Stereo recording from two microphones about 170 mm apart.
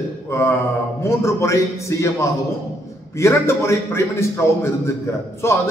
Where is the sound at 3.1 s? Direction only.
15° left (ahead or behind).